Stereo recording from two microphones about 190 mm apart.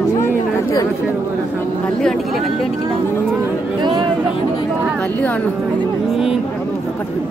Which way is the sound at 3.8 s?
25° right (ahead or behind).